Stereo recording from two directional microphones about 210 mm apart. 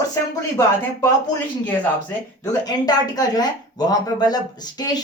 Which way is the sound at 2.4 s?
15° left (ahead or behind).